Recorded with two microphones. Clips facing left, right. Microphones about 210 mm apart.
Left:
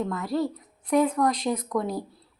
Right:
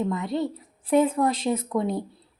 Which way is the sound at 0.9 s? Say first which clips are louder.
Right 1 dB; 25° right (ahead or behind).